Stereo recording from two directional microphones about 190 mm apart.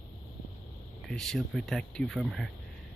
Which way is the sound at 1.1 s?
5° left (ahead or behind).